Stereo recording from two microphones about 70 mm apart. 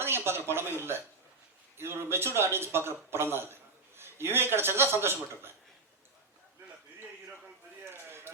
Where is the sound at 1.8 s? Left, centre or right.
Right.